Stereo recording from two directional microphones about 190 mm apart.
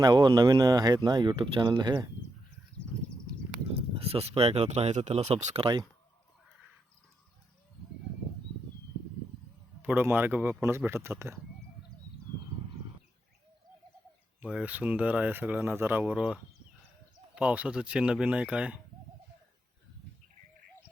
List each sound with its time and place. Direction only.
0.0 s speech: 20° right (ahead or behind)
3.7 s speech: 30° right (ahead or behind)
9.8 s speech: 10° right (ahead or behind)
14.4 s speech: 5° right (ahead or behind)